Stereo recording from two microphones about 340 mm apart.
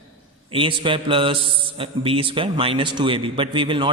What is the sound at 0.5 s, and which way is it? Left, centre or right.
A man's voice, centre.